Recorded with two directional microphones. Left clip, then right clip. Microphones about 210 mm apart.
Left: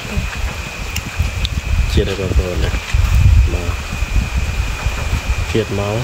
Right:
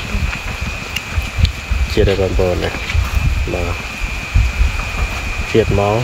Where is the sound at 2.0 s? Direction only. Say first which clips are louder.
Right 5 dB; 10° right (ahead or behind).